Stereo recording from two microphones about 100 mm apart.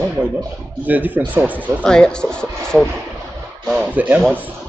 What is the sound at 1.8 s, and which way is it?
Speech, 10° left (ahead or behind).